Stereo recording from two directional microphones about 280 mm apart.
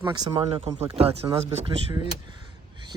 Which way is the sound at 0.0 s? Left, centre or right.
Centre.